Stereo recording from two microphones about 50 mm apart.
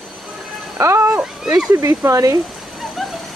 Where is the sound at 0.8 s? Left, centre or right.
Right.